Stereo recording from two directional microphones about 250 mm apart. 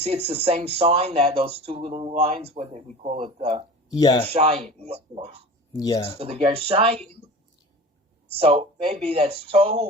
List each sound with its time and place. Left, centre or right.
0.3 s speech: right
3.9 s speech: centre
4.3 s speech: right
5.7 s speech: centre
6.1 s speech: right
8.4 s speech: right